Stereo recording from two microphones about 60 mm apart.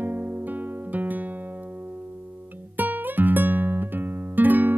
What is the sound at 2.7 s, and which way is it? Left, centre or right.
Music, right.